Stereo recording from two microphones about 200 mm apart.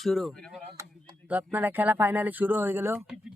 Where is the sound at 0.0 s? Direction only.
Centre (ahead or behind).